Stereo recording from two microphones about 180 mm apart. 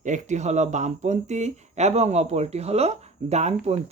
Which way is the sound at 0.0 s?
40° right (ahead or behind).